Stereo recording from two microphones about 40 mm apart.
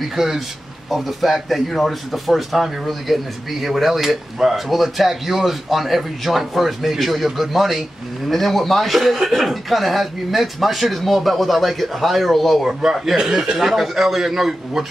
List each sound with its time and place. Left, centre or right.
0.1 s a man's voice: centre
12.6 s a man's voice: centre